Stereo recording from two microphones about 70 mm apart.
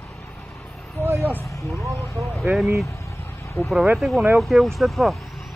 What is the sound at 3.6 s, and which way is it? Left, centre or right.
Speech, left.